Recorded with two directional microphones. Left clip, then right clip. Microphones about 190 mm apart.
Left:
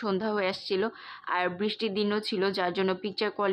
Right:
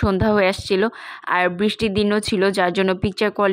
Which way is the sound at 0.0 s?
40° right (ahead or behind).